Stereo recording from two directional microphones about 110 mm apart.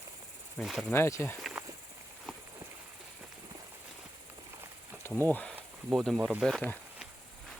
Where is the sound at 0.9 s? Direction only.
25° left (ahead or behind).